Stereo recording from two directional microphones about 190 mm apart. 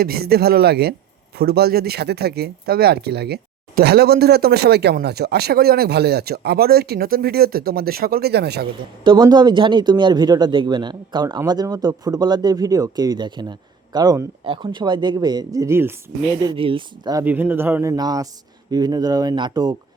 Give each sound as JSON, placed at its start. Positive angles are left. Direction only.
{"t": 0.0, "sound": "speech", "side_deg": -55}
{"t": 8.6, "sound": "speech", "side_deg": -20}
{"t": 16.6, "sound": "speech", "side_deg": -25}
{"t": 17.2, "sound": "speech", "side_deg": -10}